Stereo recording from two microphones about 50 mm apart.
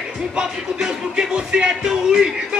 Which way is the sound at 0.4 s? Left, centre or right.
Centre.